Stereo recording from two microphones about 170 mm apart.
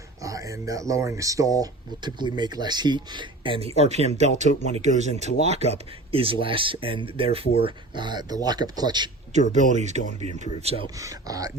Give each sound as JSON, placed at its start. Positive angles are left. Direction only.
{"t": 0.2, "sound": "speech", "side_deg": -20}
{"t": 9.5, "sound": "speech", "side_deg": -45}
{"t": 10.9, "sound": "speech", "side_deg": -20}